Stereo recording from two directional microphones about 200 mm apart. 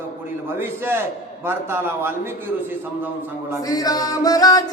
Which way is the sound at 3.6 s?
20° left (ahead or behind).